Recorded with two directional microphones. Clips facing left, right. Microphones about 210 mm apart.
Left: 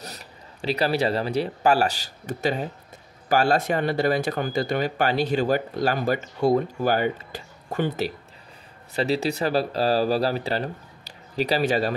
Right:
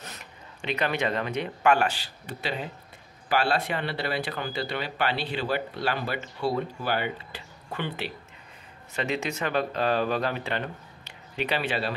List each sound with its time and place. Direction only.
0.0 s speech: 35° left (ahead or behind)